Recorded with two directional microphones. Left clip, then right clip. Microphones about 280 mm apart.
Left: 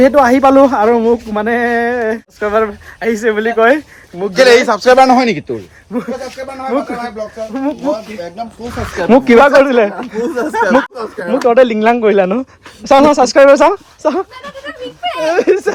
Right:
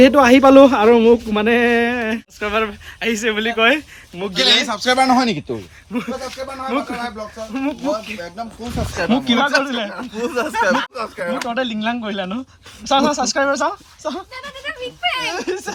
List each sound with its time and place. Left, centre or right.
0.0 s speech: centre
4.3 s speech: right
4.7 s speech: centre
9.0 s speech: centre
9.5 s speech: centre
13.1 s speech: centre
15.1 s speech: centre